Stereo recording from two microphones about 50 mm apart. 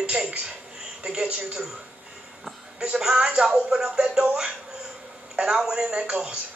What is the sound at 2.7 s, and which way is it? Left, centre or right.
A man's voice, centre.